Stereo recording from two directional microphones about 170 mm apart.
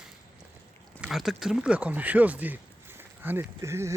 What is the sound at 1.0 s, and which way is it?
Speech, centre (ahead or behind).